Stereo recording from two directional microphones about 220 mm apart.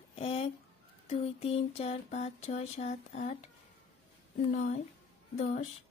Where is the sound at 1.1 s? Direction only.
30° left (ahead or behind).